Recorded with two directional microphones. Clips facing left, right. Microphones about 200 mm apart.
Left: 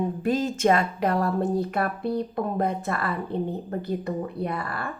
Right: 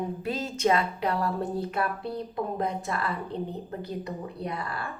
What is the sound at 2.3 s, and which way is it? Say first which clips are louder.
Speech: left 4 dB; 55° left (ahead or behind).